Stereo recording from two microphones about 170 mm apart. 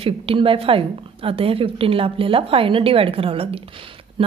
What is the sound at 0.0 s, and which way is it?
A woman's voice, 35° right (ahead or behind).